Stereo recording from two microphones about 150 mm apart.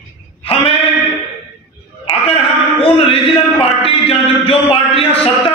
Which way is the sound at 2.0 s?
40° left (ahead or behind).